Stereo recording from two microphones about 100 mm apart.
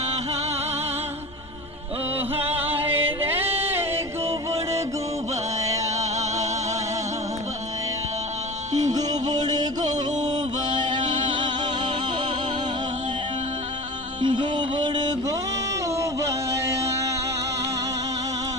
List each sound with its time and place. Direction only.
2.4 s music: 20° right (ahead or behind)
8.8 s music: 40° right (ahead or behind)
14.2 s music: 55° right (ahead or behind)
15.9 s music: 30° right (ahead or behind)